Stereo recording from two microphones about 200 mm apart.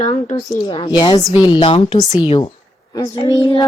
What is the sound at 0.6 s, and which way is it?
Speech, 25° left (ahead or behind).